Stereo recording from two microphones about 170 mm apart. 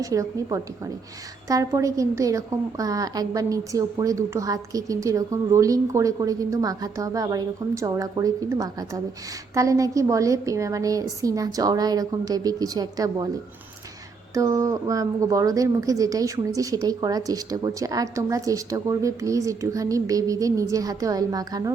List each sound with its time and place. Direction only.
0.0 s a woman's voice: 20° right (ahead or behind)
14.3 s a woman's voice: 20° right (ahead or behind)